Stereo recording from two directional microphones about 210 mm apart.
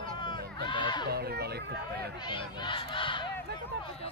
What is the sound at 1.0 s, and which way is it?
Speech, 50° right (ahead or behind).